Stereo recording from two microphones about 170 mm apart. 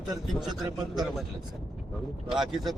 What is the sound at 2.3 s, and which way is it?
Speech, centre (ahead or behind).